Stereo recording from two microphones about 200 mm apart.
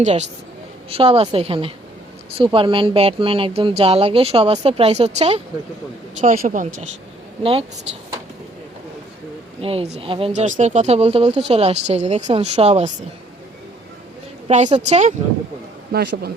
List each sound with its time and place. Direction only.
0.0 s speech: 35° right (ahead or behind)
9.6 s speech: 30° right (ahead or behind)
14.4 s a woman's voice: 35° right (ahead or behind)
15.9 s a man's voice: 50° right (ahead or behind)